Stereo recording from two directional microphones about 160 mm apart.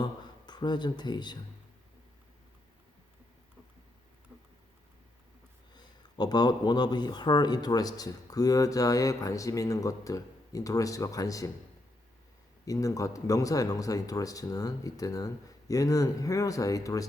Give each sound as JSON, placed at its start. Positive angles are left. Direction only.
{"t": 0.0, "sound": "speech", "side_deg": 25}
{"t": 5.7, "sound": "speech", "side_deg": 25}
{"t": 12.6, "sound": "speech", "side_deg": 20}